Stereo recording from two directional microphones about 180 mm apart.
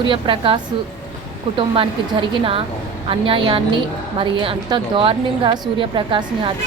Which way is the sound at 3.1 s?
30° right (ahead or behind).